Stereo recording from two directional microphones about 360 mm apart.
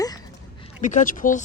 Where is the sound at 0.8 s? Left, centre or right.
Left.